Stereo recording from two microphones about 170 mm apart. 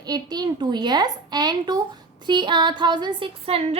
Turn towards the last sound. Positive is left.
turn(degrees=-35)  # may be behind; listen again after turning